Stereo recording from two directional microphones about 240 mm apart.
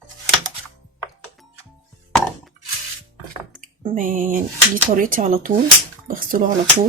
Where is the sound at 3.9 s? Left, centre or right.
Right.